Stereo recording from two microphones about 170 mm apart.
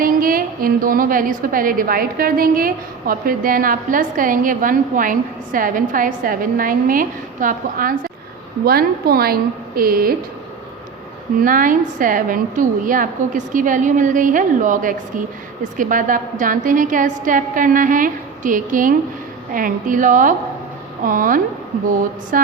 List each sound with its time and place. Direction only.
0.0 s a woman's voice: 55° right (ahead or behind)
11.4 s a woman's voice: 50° right (ahead or behind)